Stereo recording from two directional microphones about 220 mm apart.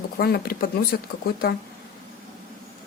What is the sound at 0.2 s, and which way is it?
Speech, 45° left (ahead or behind).